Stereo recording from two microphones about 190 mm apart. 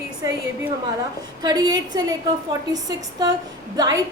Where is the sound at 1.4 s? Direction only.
20° right (ahead or behind).